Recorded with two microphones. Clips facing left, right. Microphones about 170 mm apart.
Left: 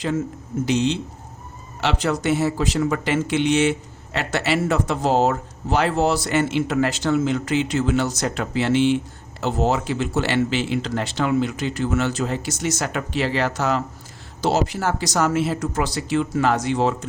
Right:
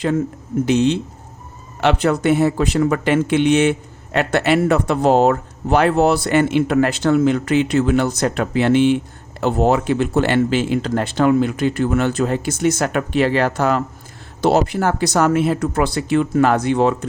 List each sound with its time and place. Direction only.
0.6 s speech: 55° right (ahead or behind)